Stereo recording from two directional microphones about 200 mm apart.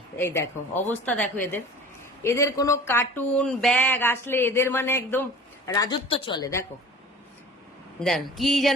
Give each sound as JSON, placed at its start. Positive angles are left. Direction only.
{"t": 0.2, "sound": "speech", "side_deg": 15}
{"t": 7.9, "sound": "speech", "side_deg": 0}